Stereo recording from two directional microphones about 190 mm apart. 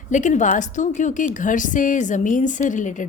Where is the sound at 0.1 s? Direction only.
40° left (ahead or behind).